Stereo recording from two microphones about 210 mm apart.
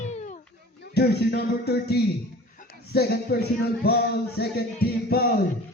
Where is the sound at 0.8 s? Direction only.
50° left (ahead or behind).